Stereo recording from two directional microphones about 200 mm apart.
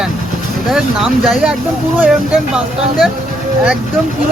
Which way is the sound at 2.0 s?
5° right (ahead or behind).